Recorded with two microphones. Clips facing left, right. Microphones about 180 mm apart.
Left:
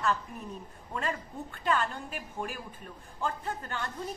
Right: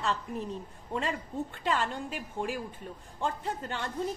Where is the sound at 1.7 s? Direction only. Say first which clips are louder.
Left 2 dB; 25° right (ahead or behind).